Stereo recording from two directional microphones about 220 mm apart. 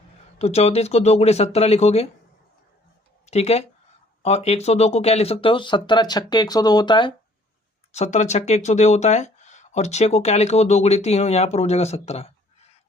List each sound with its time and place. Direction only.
0.3 s speech: 30° left (ahead or behind)
3.2 s speech: 30° left (ahead or behind)
7.9 s speech: 30° left (ahead or behind)